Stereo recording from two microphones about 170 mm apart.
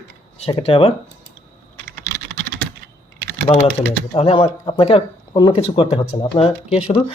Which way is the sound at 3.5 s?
30° left (ahead or behind).